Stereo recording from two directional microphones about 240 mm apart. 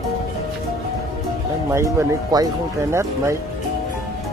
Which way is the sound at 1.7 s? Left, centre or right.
Centre.